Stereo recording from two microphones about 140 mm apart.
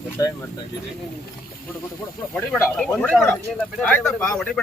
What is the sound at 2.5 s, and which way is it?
Speech, 5° left (ahead or behind).